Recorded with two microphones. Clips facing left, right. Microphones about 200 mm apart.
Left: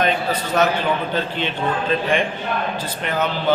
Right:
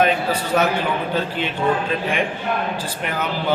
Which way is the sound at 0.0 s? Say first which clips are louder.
Right 2 dB; 10° right (ahead or behind).